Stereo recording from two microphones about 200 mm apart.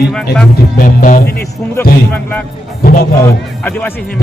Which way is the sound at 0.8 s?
45° left (ahead or behind).